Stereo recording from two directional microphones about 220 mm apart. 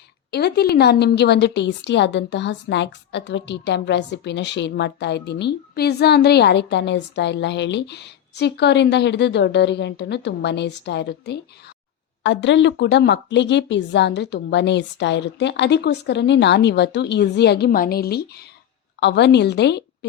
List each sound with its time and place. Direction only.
0.3 s a woman's voice: 50° left (ahead or behind)